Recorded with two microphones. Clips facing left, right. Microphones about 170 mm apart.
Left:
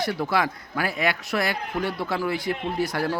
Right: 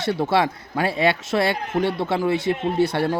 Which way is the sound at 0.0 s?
25° right (ahead or behind).